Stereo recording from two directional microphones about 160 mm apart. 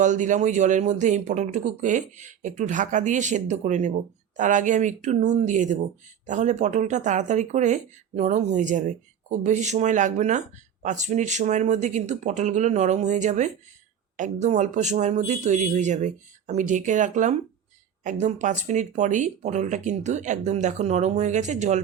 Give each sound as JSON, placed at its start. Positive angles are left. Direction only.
{"t": 0.0, "sound": "speech", "side_deg": -50}